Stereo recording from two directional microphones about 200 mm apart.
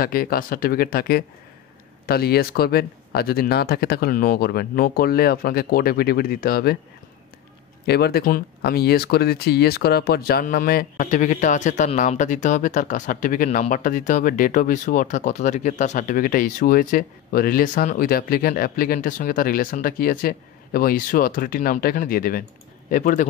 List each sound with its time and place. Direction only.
0.0 s speech: 45° left (ahead or behind)
7.8 s speech: 55° left (ahead or behind)